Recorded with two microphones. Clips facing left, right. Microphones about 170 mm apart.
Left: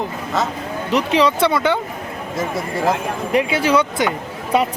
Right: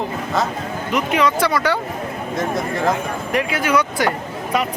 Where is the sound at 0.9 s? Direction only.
30° left (ahead or behind).